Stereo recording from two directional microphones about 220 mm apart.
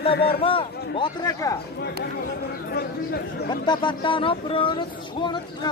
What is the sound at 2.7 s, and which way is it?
Speech, 45° left (ahead or behind).